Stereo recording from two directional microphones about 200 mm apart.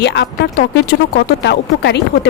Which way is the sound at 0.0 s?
55° left (ahead or behind).